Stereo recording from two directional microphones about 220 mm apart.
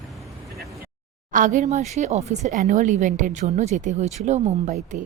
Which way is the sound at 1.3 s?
35° right (ahead or behind).